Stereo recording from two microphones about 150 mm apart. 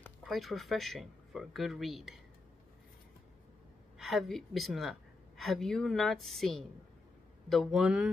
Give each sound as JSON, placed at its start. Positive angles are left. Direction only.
{"t": 0.2, "sound": "speech", "side_deg": 0}
{"t": 4.0, "sound": "speech", "side_deg": 0}